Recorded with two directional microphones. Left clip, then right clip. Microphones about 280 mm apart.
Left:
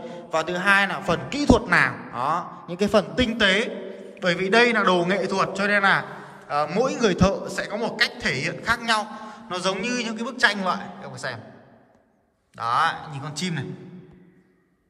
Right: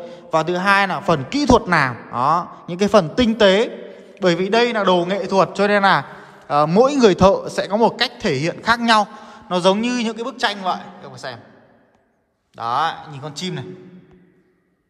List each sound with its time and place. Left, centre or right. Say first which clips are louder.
0.0 s a man's voice: right 6 dB; centre
12.5 s a man's voice: right 2 dB; centre